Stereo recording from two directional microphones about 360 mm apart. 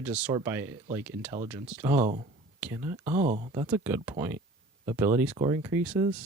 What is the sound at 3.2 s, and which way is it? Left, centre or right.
Speech, right.